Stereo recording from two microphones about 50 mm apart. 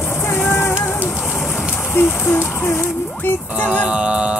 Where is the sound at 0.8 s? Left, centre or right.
Left.